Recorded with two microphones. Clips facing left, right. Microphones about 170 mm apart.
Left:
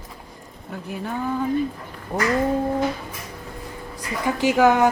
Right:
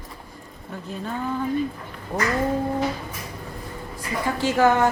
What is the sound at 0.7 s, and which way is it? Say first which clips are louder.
Speech: left 2 dB; 10° left (ahead or behind).